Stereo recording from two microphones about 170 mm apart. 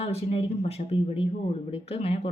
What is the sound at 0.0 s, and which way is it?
Speech, 35° left (ahead or behind).